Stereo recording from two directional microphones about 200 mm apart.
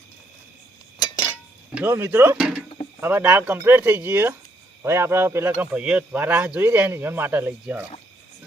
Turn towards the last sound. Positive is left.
turn(degrees=-10)  # may be behind; listen again after turning